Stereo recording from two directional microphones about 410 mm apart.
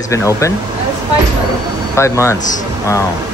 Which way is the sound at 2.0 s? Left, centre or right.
Centre.